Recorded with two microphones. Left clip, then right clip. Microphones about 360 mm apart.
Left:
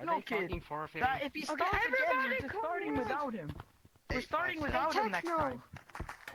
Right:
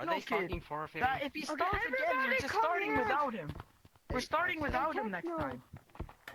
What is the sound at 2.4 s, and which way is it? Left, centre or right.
Speech, right.